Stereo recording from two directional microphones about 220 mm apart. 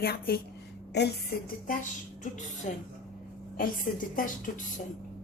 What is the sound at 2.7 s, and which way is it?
Speech, 35° left (ahead or behind).